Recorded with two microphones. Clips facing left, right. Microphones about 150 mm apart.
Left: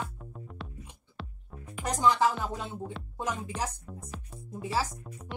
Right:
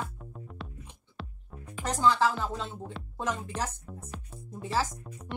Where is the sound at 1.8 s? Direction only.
15° left (ahead or behind).